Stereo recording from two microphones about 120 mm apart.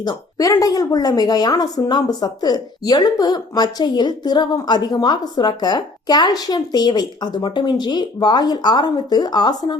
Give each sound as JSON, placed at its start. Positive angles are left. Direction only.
{"t": 0.0, "sound": "speech", "side_deg": 35}